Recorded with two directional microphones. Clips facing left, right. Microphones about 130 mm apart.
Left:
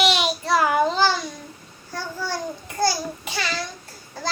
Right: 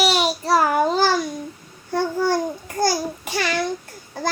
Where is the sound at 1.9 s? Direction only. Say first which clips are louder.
Right 9 dB; 55° right (ahead or behind).